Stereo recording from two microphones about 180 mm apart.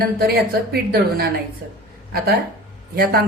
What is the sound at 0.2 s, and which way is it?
Speech, 60° right (ahead or behind).